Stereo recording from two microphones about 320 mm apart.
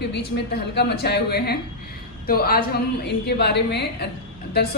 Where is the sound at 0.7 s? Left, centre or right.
Left.